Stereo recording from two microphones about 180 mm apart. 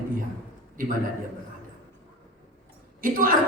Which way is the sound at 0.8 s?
50° right (ahead or behind).